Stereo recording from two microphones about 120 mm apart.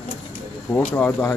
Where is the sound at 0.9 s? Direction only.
20° left (ahead or behind).